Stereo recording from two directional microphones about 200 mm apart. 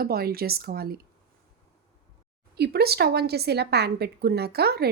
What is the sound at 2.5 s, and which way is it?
A woman's voice, 55° right (ahead or behind).